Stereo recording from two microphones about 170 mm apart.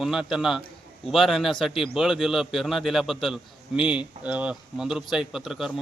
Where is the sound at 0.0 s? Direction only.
5° right (ahead or behind).